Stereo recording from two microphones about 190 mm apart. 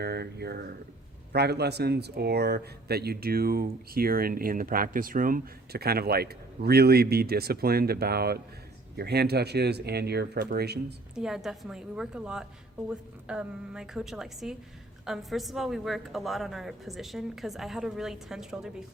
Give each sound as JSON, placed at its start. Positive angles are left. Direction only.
{"t": 0.0, "sound": "speech", "side_deg": -55}
{"t": 11.1, "sound": "a woman's voice", "side_deg": -5}